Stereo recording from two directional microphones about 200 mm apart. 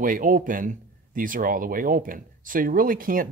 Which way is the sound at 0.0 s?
40° right (ahead or behind).